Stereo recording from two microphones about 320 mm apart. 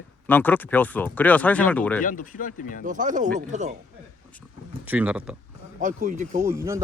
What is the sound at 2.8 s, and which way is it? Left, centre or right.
Speech, right.